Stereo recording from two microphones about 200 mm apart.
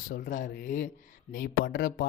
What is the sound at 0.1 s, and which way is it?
Speech, 45° left (ahead or behind).